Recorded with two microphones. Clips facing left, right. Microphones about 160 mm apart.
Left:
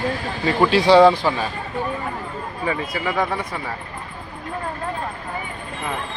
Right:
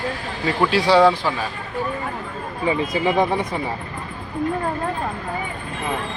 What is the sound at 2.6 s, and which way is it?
Speech, 20° right (ahead or behind).